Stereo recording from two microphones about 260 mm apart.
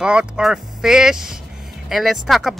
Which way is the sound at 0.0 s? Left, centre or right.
Centre.